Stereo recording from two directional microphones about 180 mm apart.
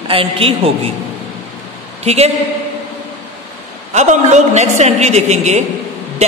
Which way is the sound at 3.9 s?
40° right (ahead or behind).